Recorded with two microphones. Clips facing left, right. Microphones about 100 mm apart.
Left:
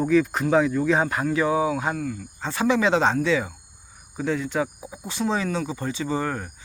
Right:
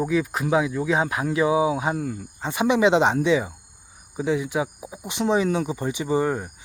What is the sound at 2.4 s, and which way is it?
Speech, 15° right (ahead or behind).